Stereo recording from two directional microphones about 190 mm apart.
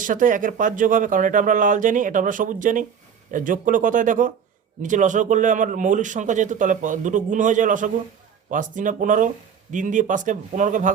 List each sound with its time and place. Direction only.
0.0 s speech: 45° right (ahead or behind)